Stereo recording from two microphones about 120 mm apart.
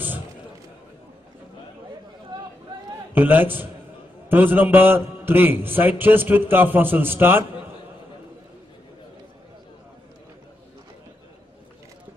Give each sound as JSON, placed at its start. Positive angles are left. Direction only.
{"t": 3.2, "sound": "a man's voice", "side_deg": -15}